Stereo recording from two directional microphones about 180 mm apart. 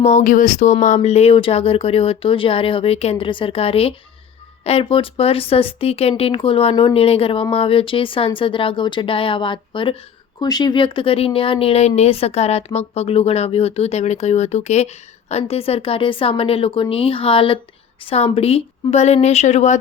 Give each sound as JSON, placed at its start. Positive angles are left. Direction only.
{"t": 0.0, "sound": "speech", "side_deg": 40}